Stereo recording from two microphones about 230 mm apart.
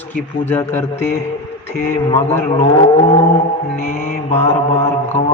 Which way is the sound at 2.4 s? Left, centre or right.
Left.